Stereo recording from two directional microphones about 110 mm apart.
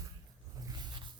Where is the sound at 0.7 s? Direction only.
45° right (ahead or behind).